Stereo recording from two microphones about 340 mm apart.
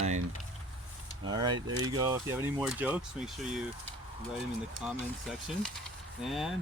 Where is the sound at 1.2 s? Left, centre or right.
Centre.